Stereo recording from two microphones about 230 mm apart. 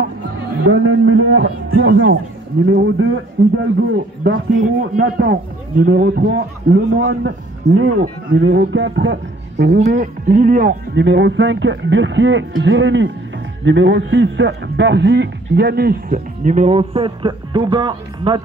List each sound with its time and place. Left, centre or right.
0.7 s a man's voice: right
4.6 s speech: right
5.9 s a man's voice: right
7.9 s speech: right
8.4 s a man's voice: right
9.8 s a man's voice: right